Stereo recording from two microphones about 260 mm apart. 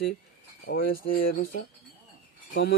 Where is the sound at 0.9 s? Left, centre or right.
Left.